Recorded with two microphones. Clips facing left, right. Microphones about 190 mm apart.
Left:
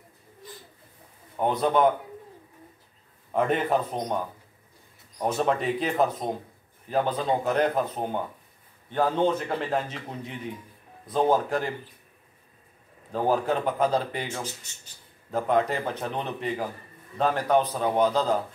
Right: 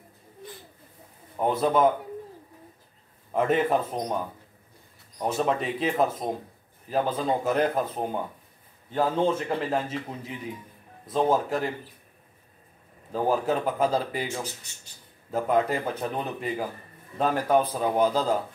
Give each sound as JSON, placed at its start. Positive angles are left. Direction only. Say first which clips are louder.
{"t": 1.4, "sound": "a man's voice", "louder": "even", "side_deg": -5}
{"t": 3.3, "sound": "a man's voice", "louder": "right 1 dB", "side_deg": -5}
{"t": 5.2, "sound": "a man's voice", "louder": "left 1 dB", "side_deg": 0}
{"t": 13.1, "sound": "a man's voice", "louder": "even", "side_deg": -5}
{"t": 15.3, "sound": "a man's voice", "louder": "even", "side_deg": -5}